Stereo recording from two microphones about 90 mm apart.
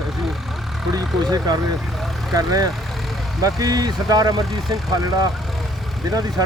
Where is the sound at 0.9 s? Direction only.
45° right (ahead or behind).